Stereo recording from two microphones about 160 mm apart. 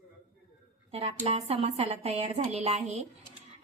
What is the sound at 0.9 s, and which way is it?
A woman's voice, 40° right (ahead or behind).